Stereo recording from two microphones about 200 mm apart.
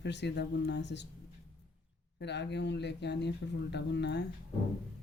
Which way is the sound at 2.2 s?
60° left (ahead or behind).